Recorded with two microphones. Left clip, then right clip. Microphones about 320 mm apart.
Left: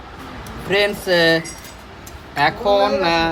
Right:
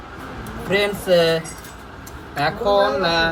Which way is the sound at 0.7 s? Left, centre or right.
Left.